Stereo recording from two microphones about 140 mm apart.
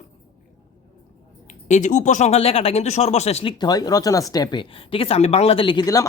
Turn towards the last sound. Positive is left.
turn(degrees=30)  # may be behind; listen again after turning